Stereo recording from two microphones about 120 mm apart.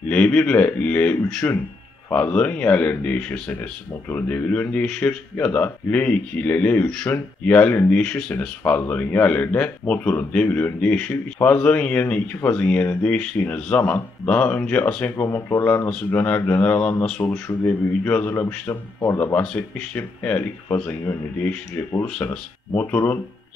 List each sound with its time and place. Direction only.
0.1 s speech: 10° left (ahead or behind)
17.2 s a man's voice: 25° left (ahead or behind)
19.4 s speech: 10° left (ahead or behind)